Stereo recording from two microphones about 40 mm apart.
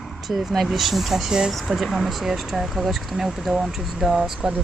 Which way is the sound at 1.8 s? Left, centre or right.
Centre.